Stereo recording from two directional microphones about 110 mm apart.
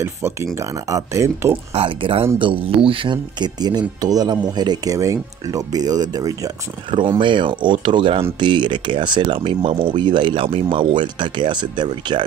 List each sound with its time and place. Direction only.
0.0 s speech: 25° right (ahead or behind)
1.7 s speech: 55° right (ahead or behind); by 6.5 s 35° right (ahead or behind)
6.9 s speech: 50° right (ahead or behind)